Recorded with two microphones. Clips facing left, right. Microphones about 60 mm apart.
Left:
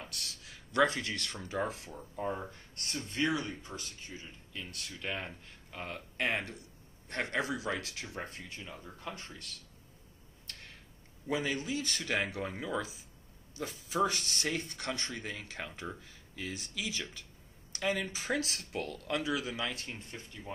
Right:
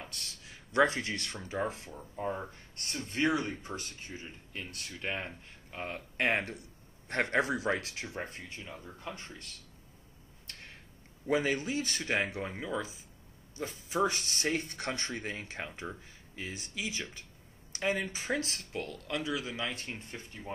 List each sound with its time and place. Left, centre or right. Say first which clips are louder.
0.5 s speech: right 1 dB; centre
1.3 s speech: even; centre
3.1 s speech: right 3 dB; right
8.1 s speech: right 2 dB; centre
11.2 s speech: right 4 dB; right
12.5 s speech: even; centre
13.9 s speech: right 1 dB; centre
14.4 s speech: right 4 dB; right
18.1 s speech: even; centre
18.5 s speech: even; centre
19.6 s speech: even; centre
20.1 s speech: right 2 dB; right